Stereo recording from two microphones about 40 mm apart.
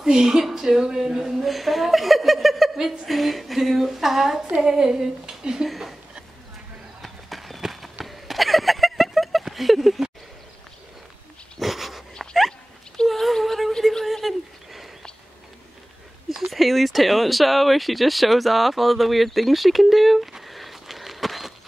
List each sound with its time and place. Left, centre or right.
0.0 s a woman's voice: centre
1.4 s a woman's voice: centre; by 5.6 s right
5.7 s speech: centre
7.0 s run: centre
7.6 s a sound: centre
11.6 s dog: centre
13.1 s a sound: centre
16.3 s speech: centre